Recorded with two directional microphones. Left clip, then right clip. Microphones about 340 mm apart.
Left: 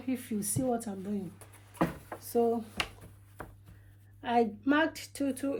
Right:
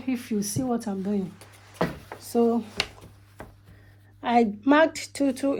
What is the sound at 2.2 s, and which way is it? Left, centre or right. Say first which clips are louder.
Speech: right 5 dB; centre.